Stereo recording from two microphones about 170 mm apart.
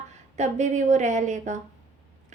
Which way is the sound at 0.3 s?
45° right (ahead or behind).